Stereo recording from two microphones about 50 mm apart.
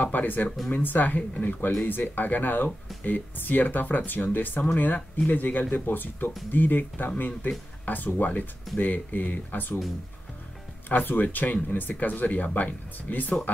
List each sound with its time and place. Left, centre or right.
0.0 s speech: left
10.9 s speech: left